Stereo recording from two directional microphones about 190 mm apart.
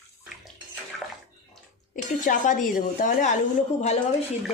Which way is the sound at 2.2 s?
45° left (ahead or behind).